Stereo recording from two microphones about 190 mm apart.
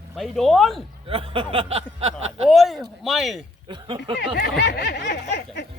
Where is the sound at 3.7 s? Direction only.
25° right (ahead or behind).